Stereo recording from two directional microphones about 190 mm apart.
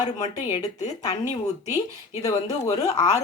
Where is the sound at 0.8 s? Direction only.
35° left (ahead or behind).